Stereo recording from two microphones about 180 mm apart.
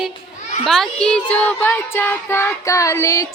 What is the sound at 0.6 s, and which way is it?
Music, centre (ahead or behind).